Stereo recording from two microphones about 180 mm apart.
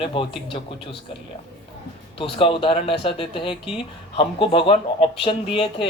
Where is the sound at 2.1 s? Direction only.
30° left (ahead or behind).